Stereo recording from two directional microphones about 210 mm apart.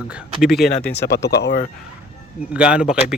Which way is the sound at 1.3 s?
50° left (ahead or behind).